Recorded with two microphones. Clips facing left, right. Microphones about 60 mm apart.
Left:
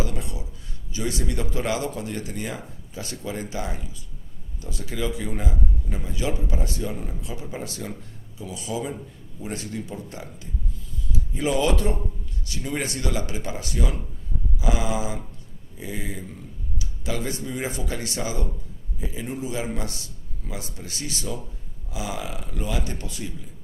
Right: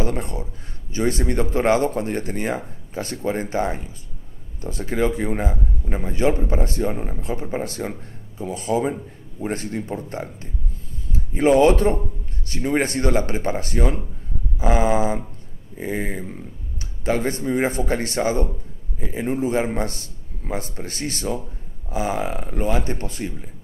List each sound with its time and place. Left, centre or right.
0.0 s speech: right